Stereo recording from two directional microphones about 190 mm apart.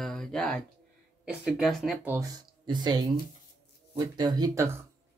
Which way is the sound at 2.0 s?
15° right (ahead or behind).